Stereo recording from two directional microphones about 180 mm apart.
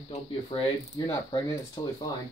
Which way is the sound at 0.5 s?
25° left (ahead or behind).